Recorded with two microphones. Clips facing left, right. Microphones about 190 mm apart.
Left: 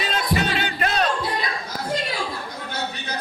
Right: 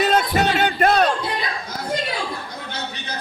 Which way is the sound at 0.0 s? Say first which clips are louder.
Right 5 dB; 50° right (ahead or behind).